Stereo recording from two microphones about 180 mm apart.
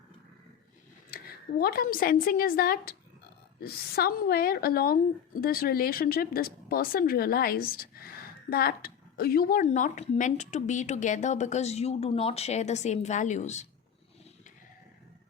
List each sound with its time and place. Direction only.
1.1 s a woman's voice: 60° left (ahead or behind)
9.6 s a woman's voice: 45° left (ahead or behind)